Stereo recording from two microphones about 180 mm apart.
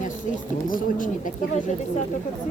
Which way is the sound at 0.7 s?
50° left (ahead or behind).